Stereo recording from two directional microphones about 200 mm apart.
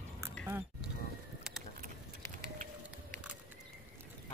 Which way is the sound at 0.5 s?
10° right (ahead or behind).